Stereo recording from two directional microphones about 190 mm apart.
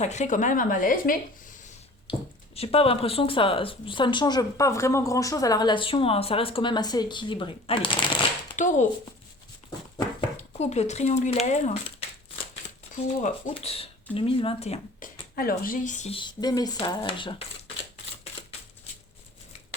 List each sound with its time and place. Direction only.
0.0 s speech: 35° left (ahead or behind)
2.1 s a woman's voice: 30° left (ahead or behind)
8.5 s speech: 40° left (ahead or behind)
10.6 s speech: 35° left (ahead or behind)
15.4 s a woman's voice: 50° left (ahead or behind); by 17.3 s 25° left (ahead or behind)